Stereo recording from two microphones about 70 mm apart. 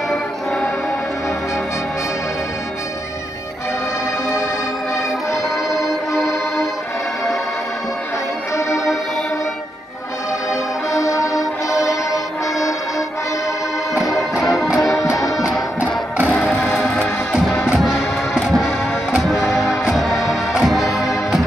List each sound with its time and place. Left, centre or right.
5.7 s music: centre
10.9 s music: left
14.4 s music: centre